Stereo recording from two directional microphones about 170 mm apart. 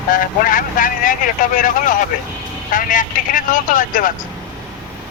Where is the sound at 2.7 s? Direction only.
50° left (ahead or behind).